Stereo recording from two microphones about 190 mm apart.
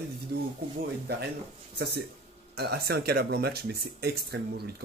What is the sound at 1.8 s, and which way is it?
Speech, 60° right (ahead or behind).